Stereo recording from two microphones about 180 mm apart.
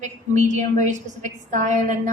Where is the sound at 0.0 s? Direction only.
40° right (ahead or behind).